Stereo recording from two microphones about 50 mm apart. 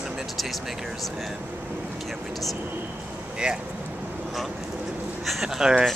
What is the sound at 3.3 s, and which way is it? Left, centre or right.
Speech, centre.